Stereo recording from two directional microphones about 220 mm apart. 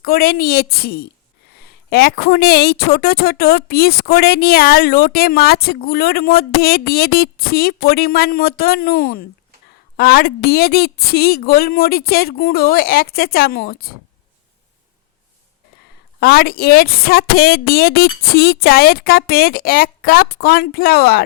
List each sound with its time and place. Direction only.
0.0 s a woman's voice: 45° left (ahead or behind)
16.2 s a woman's voice: 45° left (ahead or behind)